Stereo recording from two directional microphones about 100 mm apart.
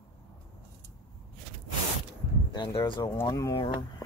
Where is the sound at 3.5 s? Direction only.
60° left (ahead or behind).